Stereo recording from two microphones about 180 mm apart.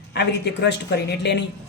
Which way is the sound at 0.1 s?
70° left (ahead or behind).